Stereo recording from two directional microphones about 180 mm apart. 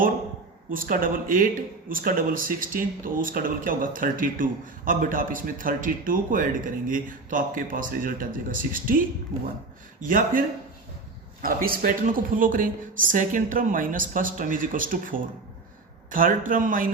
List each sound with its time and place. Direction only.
0.7 s speech: 50° right (ahead or behind)
11.4 s speech: 55° right (ahead or behind)